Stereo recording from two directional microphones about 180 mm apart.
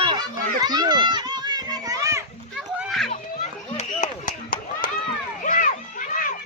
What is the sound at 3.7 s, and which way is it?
Clapping, 45° left (ahead or behind).